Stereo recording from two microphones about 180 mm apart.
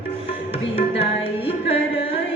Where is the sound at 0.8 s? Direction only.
30° left (ahead or behind).